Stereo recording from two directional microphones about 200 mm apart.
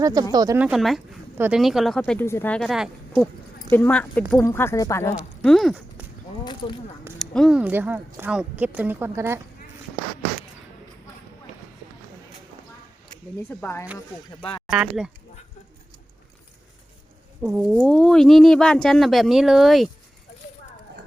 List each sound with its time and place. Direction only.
0.0 s speech: 20° right (ahead or behind)
0.6 s speech: centre (ahead or behind)
3.7 s speech: 10° left (ahead or behind)
5.4 s a sound: centre (ahead or behind)
6.4 s speech: 25° left (ahead or behind)
7.2 s speech: centre (ahead or behind)
13.5 s speech: 10° left (ahead or behind)
14.7 s speech: 5° right (ahead or behind)
17.4 s speech: 10° right (ahead or behind)